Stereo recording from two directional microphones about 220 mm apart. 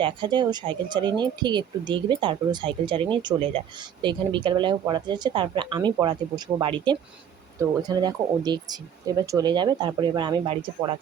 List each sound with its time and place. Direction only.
0.0 s speech: 20° right (ahead or behind)